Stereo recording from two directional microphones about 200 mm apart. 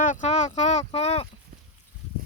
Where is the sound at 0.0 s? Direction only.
40° left (ahead or behind).